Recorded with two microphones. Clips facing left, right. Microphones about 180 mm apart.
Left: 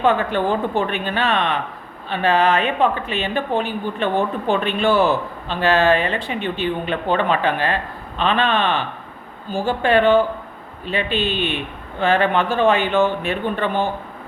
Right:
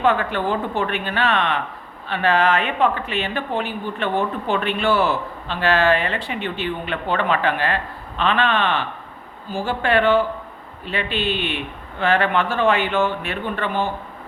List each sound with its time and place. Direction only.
0.0 s speech: 20° left (ahead or behind)
11.3 s speech: 15° right (ahead or behind)
11.9 s speech: 15° left (ahead or behind)